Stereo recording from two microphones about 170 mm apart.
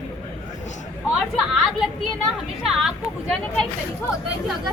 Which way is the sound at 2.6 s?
Centre (ahead or behind).